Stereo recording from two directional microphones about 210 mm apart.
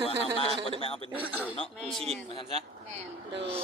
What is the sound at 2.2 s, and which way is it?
Speech, 25° left (ahead or behind).